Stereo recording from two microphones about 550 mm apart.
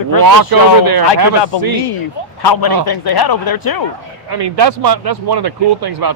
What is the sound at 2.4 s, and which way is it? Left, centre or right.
A man's voice, left.